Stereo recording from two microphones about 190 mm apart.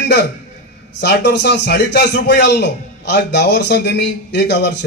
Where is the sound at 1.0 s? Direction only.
65° left (ahead or behind).